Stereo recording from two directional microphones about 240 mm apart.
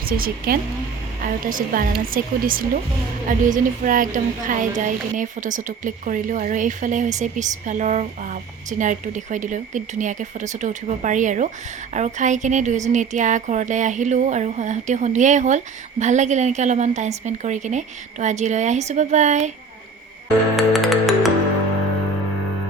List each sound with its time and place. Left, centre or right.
0.0 s a woman's voice: right
20.6 s music: centre